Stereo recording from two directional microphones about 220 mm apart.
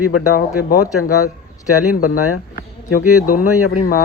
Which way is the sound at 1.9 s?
90° left.